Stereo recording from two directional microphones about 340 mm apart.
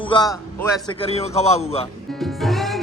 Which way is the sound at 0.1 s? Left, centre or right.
Centre.